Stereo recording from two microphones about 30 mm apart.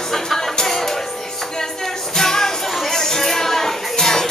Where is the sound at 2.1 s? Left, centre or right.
Centre.